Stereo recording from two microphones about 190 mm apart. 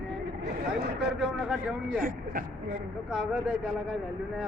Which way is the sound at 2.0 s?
50° right (ahead or behind).